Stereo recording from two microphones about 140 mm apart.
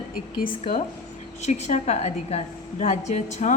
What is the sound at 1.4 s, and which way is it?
A woman's voice, 55° left (ahead or behind).